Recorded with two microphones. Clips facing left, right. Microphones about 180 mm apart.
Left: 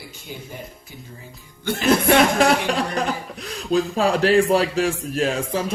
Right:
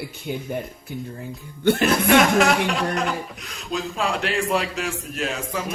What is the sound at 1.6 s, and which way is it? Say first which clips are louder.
Speech: right 6 dB; 60° right (ahead or behind).